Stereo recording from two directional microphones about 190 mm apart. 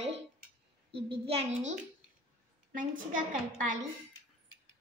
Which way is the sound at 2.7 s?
45° right (ahead or behind).